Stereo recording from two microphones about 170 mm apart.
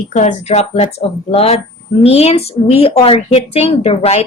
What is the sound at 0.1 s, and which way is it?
Speech, 45° left (ahead or behind).